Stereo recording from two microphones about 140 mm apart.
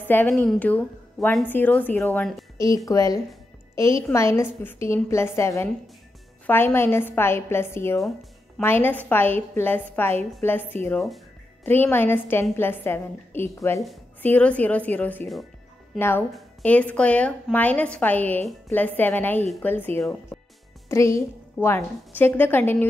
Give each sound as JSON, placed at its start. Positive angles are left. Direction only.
{"t": 0.1, "sound": "a woman's voice", "side_deg": 15}